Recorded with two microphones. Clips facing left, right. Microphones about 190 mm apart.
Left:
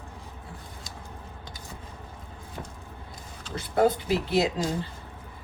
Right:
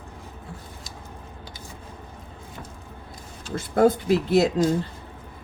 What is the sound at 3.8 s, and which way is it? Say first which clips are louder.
Speech: right 6 dB; 45° right (ahead or behind).